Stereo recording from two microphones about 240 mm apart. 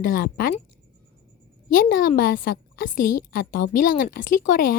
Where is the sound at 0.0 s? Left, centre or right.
Left.